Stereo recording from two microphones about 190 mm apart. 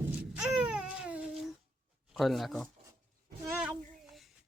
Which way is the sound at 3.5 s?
5° right (ahead or behind).